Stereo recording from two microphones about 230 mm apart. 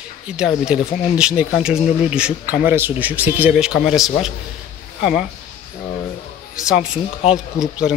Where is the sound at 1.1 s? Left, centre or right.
Centre.